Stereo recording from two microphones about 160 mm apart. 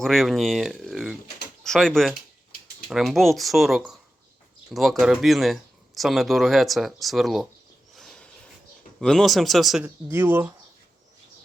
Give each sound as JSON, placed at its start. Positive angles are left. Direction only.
{"t": 0.0, "sound": "speech", "side_deg": 0}
{"t": 7.9, "sound": "a sound", "side_deg": 5}
{"t": 9.0, "sound": "speech", "side_deg": 0}
{"t": 10.1, "sound": "speech", "side_deg": -15}